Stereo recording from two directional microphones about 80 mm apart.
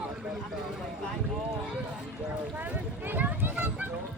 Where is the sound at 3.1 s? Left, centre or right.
Right.